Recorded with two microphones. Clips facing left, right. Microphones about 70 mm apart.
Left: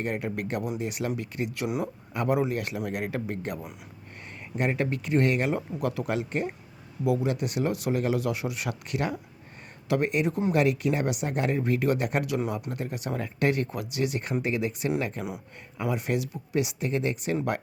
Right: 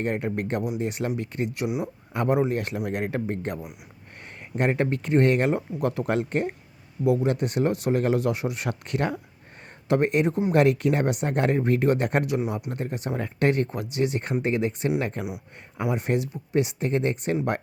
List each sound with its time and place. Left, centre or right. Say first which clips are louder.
0.0 s a man's voice: right 3 dB; right
7.0 s a man's voice: right 3 dB; right